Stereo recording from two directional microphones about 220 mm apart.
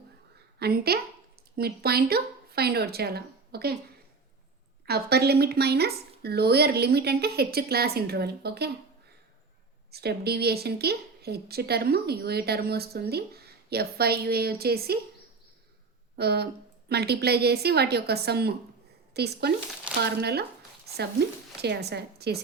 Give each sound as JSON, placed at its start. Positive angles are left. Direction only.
{"t": 0.6, "sound": "a woman's voice", "side_deg": -45}
{"t": 4.9, "sound": "a woman's voice", "side_deg": -45}
{"t": 9.9, "sound": "a woman's voice", "side_deg": -45}
{"t": 16.1, "sound": "a woman's voice", "side_deg": -45}
{"t": 21.6, "sound": "a woman's voice", "side_deg": -50}